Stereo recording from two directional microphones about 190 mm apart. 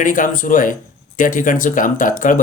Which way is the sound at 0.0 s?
45° left (ahead or behind).